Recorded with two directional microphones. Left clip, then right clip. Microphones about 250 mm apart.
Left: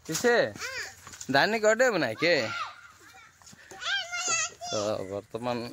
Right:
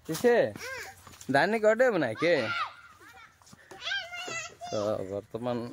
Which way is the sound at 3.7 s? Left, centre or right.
Centre.